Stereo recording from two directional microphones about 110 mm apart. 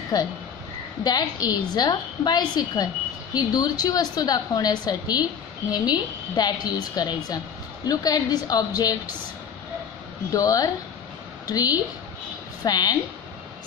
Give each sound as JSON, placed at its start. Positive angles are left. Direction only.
{"t": 0.1, "sound": "a woman's voice", "side_deg": 35}
{"t": 10.3, "sound": "a woman's voice", "side_deg": 30}